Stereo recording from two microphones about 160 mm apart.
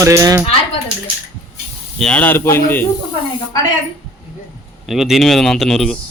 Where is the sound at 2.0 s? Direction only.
5° left (ahead or behind).